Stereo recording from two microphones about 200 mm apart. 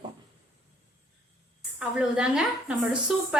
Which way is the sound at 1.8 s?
5° right (ahead or behind).